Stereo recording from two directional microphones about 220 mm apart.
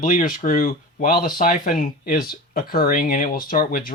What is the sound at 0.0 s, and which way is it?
Speech, 35° left (ahead or behind).